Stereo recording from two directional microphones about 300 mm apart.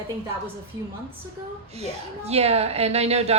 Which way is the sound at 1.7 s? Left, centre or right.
Right.